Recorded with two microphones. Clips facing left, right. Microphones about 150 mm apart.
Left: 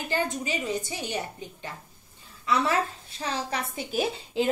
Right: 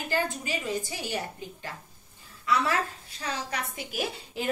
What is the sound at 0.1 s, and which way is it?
Speech, 20° left (ahead or behind).